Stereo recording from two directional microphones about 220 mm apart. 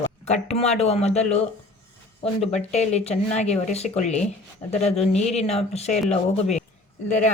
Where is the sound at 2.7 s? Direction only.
30° left (ahead or behind).